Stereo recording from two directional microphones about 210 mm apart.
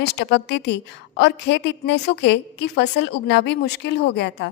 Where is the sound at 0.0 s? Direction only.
55° left (ahead or behind).